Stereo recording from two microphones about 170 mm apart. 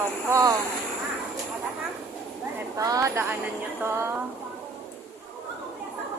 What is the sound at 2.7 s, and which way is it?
A woman's voice, 20° right (ahead or behind).